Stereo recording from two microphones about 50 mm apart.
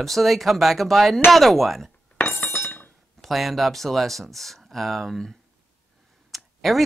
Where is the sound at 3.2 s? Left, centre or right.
Centre.